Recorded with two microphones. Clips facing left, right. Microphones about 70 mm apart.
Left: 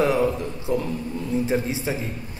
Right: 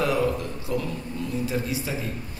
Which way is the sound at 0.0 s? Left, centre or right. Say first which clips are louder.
Left 3 dB; left.